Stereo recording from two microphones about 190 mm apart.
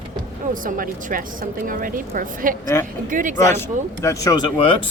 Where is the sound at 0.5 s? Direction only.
45° right (ahead or behind).